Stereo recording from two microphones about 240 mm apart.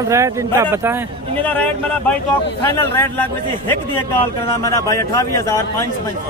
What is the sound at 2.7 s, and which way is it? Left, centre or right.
A man's voice, centre.